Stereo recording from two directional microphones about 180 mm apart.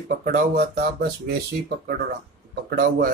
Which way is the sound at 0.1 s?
45° right (ahead or behind).